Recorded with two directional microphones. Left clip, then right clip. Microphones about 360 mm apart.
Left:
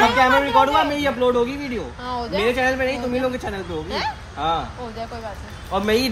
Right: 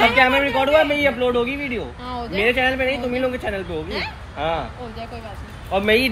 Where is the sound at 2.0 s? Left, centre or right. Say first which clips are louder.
Left 2 dB; centre.